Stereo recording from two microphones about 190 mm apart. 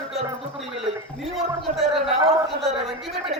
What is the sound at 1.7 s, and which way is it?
Gargling, 40° right (ahead or behind).